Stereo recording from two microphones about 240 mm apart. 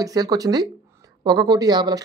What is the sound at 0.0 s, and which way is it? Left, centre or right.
Speech, centre.